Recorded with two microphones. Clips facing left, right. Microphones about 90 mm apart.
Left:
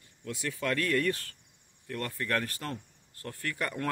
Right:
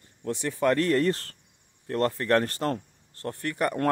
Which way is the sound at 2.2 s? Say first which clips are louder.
Right 8 dB; 35° right (ahead or behind).